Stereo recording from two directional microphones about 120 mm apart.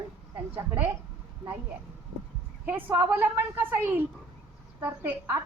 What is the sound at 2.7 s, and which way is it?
Speech, 15° right (ahead or behind).